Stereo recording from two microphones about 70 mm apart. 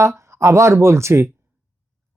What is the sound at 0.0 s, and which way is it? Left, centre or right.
Speech, right.